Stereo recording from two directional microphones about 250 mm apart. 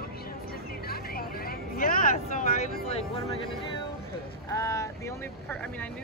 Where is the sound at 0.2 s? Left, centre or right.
Left.